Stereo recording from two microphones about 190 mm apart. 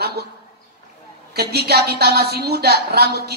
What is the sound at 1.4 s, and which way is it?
A woman's voice, 55° right (ahead or behind).